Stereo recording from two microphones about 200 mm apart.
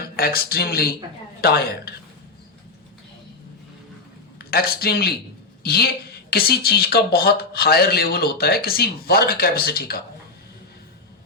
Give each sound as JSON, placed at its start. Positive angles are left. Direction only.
{"t": 0.2, "sound": "speech", "side_deg": 50}
{"t": 4.5, "sound": "speech", "side_deg": 50}